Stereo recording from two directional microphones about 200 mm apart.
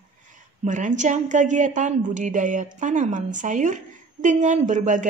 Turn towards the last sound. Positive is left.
turn(degrees=-40)  # may be behind; listen again after turning